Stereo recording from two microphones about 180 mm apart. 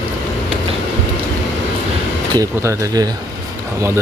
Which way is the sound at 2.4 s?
20° right (ahead or behind).